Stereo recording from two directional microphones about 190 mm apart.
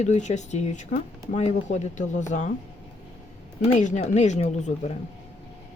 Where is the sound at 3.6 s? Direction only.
35° left (ahead or behind).